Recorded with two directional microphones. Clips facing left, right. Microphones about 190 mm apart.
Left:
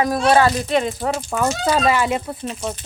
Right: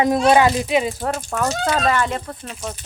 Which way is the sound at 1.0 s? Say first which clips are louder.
Left 2 dB; 5° left (ahead or behind).